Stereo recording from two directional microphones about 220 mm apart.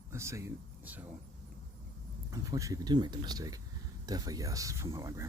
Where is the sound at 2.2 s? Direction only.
15° right (ahead or behind).